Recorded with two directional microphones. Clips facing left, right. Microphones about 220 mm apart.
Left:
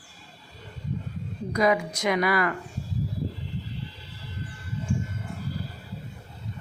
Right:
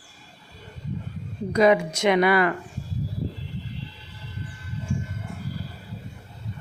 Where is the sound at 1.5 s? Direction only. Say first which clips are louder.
Right 5 dB; 25° right (ahead or behind).